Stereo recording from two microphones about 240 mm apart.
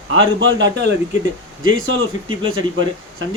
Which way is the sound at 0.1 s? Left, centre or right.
Right.